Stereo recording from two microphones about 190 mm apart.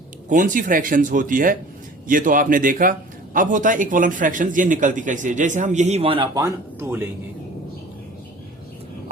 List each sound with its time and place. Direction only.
0.3 s speech: 45° right (ahead or behind); by 7.0 s 15° right (ahead or behind)